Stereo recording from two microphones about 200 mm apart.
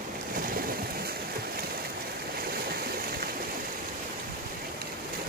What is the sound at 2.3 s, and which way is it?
Stream, 50° right (ahead or behind).